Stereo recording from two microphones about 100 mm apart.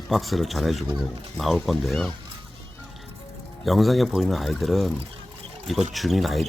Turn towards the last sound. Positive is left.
turn(degrees=0)  # may be behind; listen again after turning